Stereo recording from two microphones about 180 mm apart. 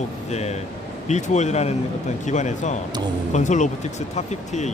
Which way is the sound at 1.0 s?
40° left (ahead or behind).